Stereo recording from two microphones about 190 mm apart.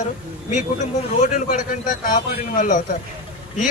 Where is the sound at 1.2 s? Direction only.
40° left (ahead or behind).